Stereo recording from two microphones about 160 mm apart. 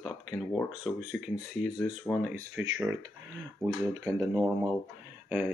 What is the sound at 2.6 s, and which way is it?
Speech, 20° right (ahead or behind).